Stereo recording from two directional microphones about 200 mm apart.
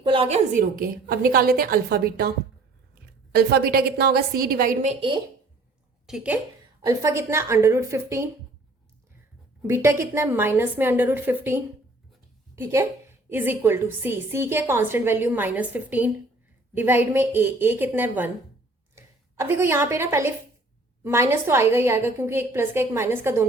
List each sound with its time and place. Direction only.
0.0 s a woman's voice: 25° right (ahead or behind)
0.8 s a woman's voice: 45° right (ahead or behind)
3.3 s a woman's voice: 50° right (ahead or behind); by 5.2 s 25° right (ahead or behind)
6.1 s a woman's voice: 5° right (ahead or behind)
9.6 s a woman's voice: 15° right (ahead or behind)